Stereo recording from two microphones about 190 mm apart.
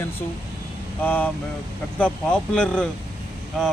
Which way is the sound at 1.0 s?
10° left (ahead or behind).